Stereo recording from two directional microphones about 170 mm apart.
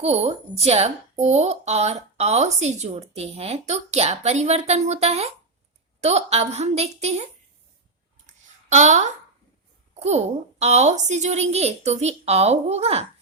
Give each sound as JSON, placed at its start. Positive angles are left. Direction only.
{"t": 0.0, "sound": "speech", "side_deg": -35}
{"t": 8.7, "sound": "speech", "side_deg": -45}